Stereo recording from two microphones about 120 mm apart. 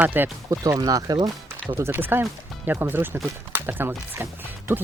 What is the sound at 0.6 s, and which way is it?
Speech, 30° right (ahead or behind).